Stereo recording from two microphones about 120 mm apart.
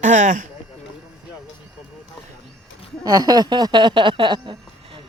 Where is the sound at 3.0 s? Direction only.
35° right (ahead or behind).